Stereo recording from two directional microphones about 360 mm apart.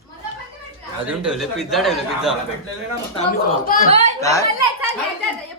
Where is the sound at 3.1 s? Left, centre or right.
Left.